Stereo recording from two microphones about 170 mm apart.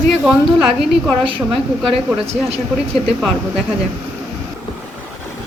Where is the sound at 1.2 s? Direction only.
30° right (ahead or behind).